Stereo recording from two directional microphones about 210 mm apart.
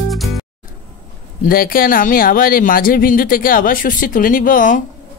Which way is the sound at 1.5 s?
45° left (ahead or behind).